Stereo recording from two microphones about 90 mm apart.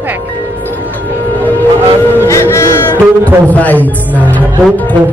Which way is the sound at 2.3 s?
30° left (ahead or behind).